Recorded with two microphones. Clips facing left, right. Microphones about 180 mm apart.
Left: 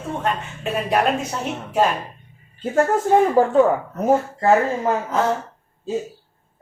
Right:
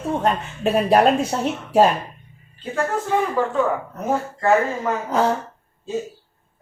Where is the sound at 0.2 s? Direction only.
35° right (ahead or behind).